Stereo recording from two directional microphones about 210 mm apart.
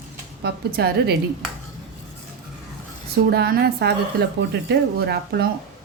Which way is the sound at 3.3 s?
50° right (ahead or behind).